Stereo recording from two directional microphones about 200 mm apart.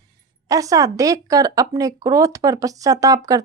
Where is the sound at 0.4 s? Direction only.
15° right (ahead or behind).